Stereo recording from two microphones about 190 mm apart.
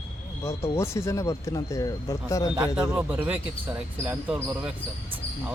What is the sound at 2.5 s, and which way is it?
A man's voice, 5° right (ahead or behind).